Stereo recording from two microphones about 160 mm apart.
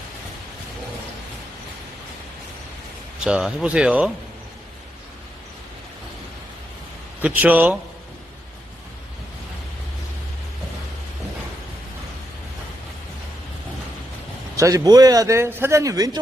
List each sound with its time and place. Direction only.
3.2 s speech: 5° right (ahead or behind)
7.2 s speech: 10° right (ahead or behind)
14.5 s a man's voice: 20° right (ahead or behind)